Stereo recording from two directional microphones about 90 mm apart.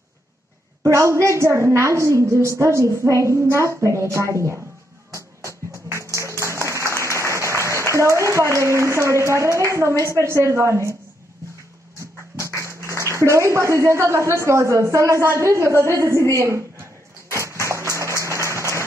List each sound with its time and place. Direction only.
0.8 s a woman's voice: 35° right (ahead or behind)
5.7 s music: 35° right (ahead or behind)
10.2 s a woman's voice: 30° right (ahead or behind)
12.0 s speech: 35° right (ahead or behind)
17.3 s a sound: 35° right (ahead or behind)